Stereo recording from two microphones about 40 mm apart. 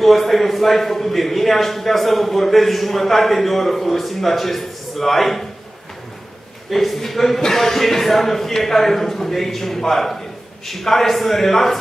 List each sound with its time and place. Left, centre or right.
0.0 s a man's voice: centre
6.7 s a man's voice: centre